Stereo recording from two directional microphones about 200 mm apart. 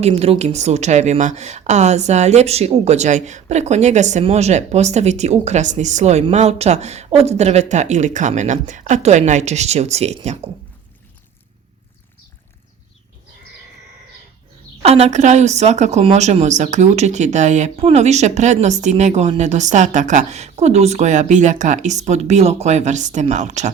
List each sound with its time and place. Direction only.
0.0 s a woman's voice: 30° right (ahead or behind)
14.8 s a woman's voice: 30° right (ahead or behind)